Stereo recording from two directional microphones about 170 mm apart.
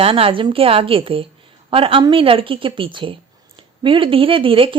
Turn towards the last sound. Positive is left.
turn(degrees=-30)  # may be behind; listen again after turning